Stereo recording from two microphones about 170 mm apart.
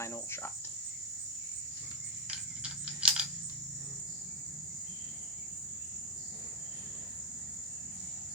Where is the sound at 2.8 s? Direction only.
5° right (ahead or behind).